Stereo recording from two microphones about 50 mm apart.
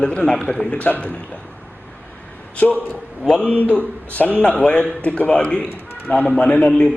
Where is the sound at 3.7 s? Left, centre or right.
Left.